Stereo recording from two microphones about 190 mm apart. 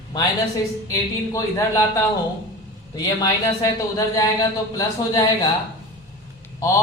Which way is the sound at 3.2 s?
20° left (ahead or behind).